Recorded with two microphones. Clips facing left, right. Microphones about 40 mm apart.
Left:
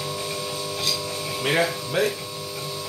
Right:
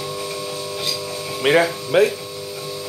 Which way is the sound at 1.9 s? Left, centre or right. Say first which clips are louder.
Right 8 dB; right.